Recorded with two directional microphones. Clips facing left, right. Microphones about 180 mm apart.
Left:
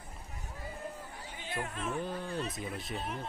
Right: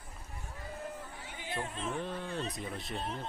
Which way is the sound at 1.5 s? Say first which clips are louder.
Even; 25° right (ahead or behind).